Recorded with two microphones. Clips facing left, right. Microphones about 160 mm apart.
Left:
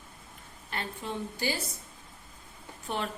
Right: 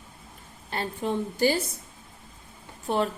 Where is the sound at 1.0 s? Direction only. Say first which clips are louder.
Right 12 dB; 45° right (ahead or behind).